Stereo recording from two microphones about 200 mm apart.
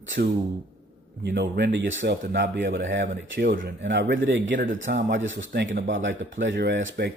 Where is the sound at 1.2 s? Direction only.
60° right (ahead or behind).